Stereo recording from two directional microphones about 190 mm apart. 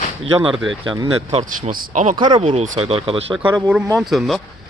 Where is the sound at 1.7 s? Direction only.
45° right (ahead or behind).